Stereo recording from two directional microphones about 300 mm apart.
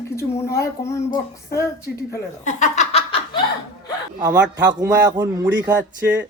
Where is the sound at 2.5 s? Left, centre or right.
Left.